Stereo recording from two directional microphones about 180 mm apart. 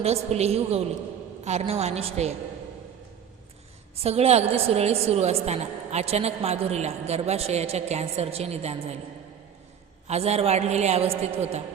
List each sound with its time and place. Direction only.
0.0 s a woman's voice: 35° right (ahead or behind)
4.0 s a woman's voice: 35° right (ahead or behind)
10.1 s a woman's voice: 35° right (ahead or behind)